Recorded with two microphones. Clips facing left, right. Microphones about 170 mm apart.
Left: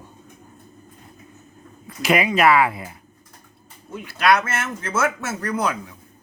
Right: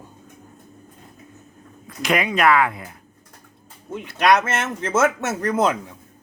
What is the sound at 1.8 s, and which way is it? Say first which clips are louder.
Speech: left 2 dB; 5° left (ahead or behind).